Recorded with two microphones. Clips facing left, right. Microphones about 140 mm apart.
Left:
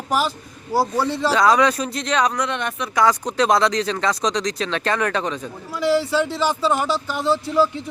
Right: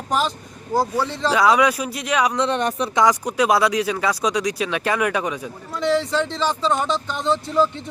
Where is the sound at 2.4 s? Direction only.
35° right (ahead or behind).